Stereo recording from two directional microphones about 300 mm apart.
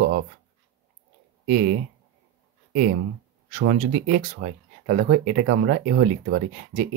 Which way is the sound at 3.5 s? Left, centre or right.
Right.